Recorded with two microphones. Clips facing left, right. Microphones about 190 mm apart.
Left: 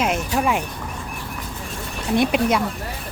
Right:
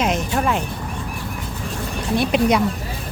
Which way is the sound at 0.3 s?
10° left (ahead or behind).